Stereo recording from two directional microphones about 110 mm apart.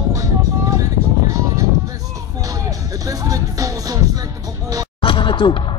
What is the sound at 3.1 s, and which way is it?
Music, 30° right (ahead or behind).